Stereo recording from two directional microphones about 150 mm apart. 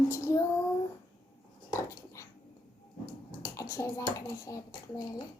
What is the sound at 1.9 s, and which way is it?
Dog, 20° left (ahead or behind).